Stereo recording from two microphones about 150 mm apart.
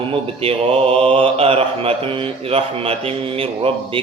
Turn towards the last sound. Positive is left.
turn(degrees=-35)  # may be behind; listen again after turning